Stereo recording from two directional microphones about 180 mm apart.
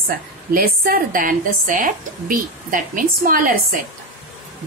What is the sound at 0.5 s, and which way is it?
Speech, 55° right (ahead or behind).